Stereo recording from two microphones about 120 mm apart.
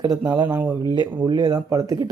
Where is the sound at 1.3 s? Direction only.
35° right (ahead or behind).